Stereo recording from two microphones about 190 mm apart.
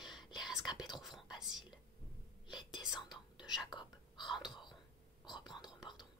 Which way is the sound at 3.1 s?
20° left (ahead or behind).